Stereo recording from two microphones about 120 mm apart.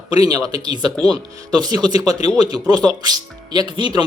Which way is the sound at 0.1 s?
30° right (ahead or behind).